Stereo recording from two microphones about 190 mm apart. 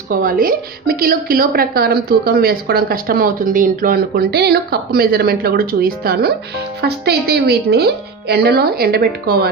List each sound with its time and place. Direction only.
0.1 s a woman's voice: 45° right (ahead or behind)